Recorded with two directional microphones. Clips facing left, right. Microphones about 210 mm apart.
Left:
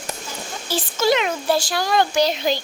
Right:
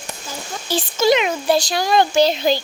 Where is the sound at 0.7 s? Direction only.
15° right (ahead or behind).